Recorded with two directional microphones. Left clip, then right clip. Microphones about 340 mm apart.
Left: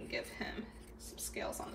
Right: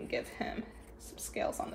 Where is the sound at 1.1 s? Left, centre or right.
Right.